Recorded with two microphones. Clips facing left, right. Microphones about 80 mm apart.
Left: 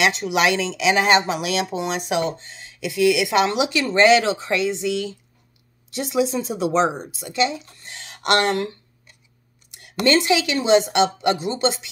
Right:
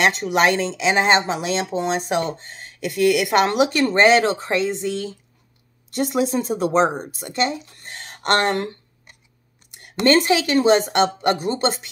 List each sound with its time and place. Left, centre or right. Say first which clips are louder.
0.0 s a woman's voice: right 2 dB; right
10.0 s a woman's voice: right 2 dB; right